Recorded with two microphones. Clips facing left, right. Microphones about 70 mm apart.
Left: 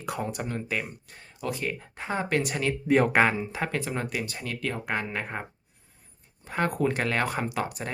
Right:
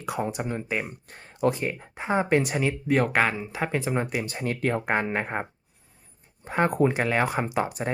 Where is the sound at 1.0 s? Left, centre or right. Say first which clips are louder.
Right 9 dB; right.